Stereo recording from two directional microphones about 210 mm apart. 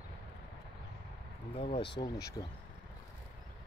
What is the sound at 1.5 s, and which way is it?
Speech, 30° left (ahead or behind).